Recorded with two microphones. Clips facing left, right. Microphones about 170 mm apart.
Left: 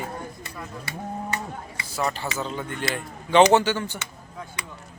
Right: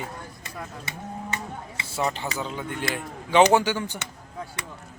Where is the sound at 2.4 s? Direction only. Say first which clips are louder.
Left 1 dB; 10° right (ahead or behind).